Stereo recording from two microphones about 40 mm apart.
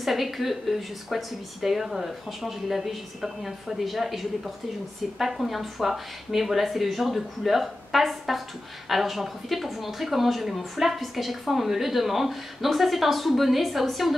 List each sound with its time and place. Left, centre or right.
0.0 s speech: centre